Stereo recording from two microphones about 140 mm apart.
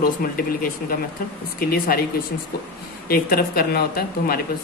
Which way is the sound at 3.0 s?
90° left.